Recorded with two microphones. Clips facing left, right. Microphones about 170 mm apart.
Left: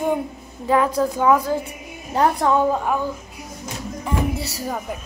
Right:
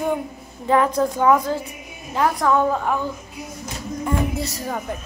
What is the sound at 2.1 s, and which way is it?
Speech, 30° left (ahead or behind).